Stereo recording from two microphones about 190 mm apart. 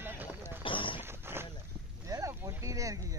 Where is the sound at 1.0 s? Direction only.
10° right (ahead or behind).